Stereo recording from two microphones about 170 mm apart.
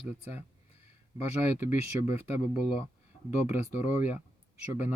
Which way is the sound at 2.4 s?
35° left (ahead or behind).